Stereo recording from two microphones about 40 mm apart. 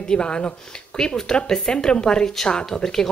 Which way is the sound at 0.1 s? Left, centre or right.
Left.